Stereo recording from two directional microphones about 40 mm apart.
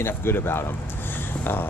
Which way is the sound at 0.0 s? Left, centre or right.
Left.